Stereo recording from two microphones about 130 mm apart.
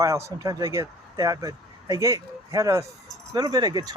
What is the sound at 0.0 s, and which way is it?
Speech, 25° right (ahead or behind).